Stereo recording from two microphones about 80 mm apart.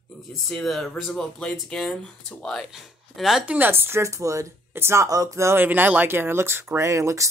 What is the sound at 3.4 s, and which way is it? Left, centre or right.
Speech, centre.